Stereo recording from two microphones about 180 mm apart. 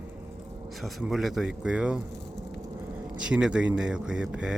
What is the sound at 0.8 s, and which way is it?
Speech, centre (ahead or behind).